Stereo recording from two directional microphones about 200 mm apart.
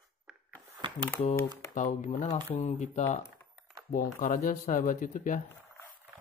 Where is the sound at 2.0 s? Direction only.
35° left (ahead or behind).